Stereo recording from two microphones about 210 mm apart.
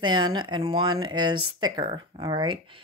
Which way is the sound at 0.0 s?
20° right (ahead or behind).